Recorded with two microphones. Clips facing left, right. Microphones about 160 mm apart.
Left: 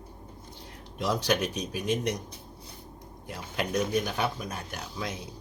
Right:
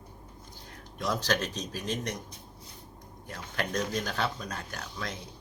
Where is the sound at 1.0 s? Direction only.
15° left (ahead or behind).